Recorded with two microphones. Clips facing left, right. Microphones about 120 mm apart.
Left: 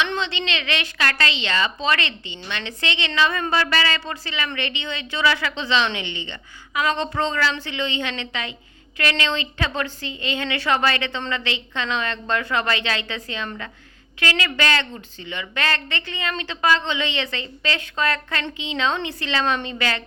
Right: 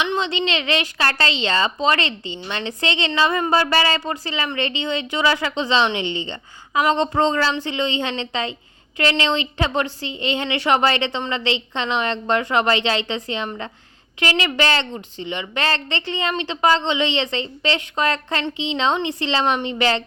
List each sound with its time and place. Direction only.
0.0 s a woman's voice: 15° right (ahead or behind)
4.0 s a woman's voice: 15° right (ahead or behind)